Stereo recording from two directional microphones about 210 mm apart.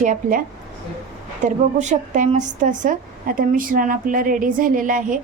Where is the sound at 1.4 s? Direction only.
35° right (ahead or behind).